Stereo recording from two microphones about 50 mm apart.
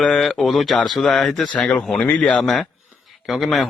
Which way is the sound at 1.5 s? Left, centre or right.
Left.